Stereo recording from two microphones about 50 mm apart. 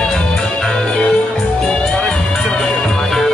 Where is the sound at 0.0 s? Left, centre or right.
Centre.